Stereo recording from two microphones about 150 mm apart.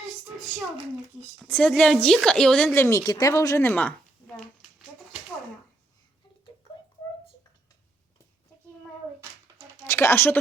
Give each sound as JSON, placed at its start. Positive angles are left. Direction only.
{"t": 1.4, "sound": "a woman's voice", "side_deg": 10}
{"t": 9.8, "sound": "speech", "side_deg": 15}